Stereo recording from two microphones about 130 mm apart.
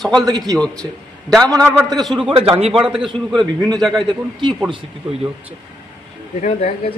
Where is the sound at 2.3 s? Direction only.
45° right (ahead or behind).